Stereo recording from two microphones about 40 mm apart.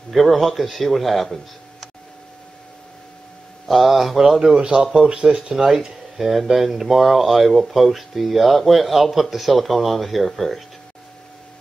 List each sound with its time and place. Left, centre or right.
0.1 s speech: centre
3.6 s speech: centre
4.2 s speech: centre